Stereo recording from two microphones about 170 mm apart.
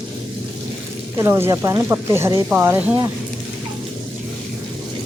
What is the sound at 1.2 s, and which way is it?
Speech, 15° right (ahead or behind).